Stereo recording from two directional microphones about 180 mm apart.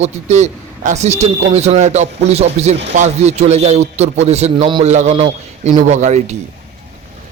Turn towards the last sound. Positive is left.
turn(degrees=-40)  # may be behind; listen again after turning